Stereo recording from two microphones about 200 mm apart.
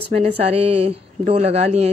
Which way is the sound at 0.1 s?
30° right (ahead or behind).